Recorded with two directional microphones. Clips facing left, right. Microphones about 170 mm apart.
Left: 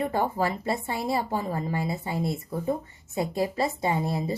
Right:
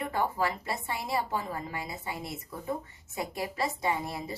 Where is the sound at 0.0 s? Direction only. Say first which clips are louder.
Left 4 dB; 30° left (ahead or behind).